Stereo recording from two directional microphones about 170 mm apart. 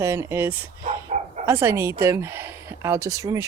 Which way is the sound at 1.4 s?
15° right (ahead or behind).